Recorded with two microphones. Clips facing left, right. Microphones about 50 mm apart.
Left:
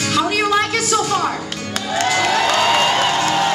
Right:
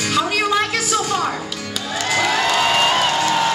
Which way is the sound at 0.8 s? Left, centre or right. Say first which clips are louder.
Left 2 dB; centre.